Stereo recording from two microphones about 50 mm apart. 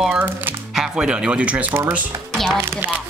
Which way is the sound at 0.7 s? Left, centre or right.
Centre.